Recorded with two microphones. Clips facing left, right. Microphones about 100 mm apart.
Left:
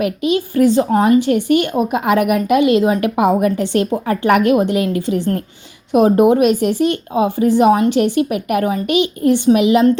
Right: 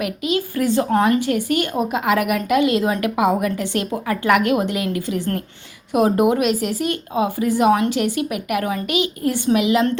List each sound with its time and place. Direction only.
0.0 s speech: 25° left (ahead or behind)